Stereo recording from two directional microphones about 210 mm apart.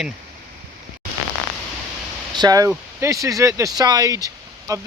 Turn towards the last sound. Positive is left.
turn(degrees=-15)  # may be behind; listen again after turning